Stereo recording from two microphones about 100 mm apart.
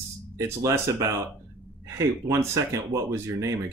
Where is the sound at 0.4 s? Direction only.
30° right (ahead or behind).